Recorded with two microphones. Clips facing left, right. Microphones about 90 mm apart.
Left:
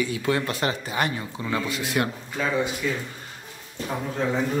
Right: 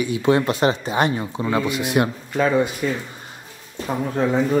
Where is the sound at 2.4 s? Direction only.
50° right (ahead or behind).